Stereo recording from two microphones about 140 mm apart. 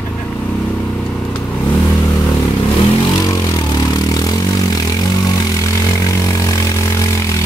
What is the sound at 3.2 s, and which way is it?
Vehicle, 25° left (ahead or behind).